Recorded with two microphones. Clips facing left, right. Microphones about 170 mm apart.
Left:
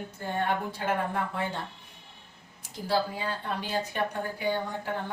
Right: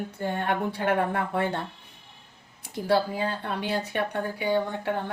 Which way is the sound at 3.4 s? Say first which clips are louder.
Right 2 dB; 65° right (ahead or behind).